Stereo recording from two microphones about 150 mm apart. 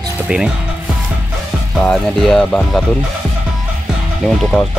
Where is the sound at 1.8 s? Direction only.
5° left (ahead or behind).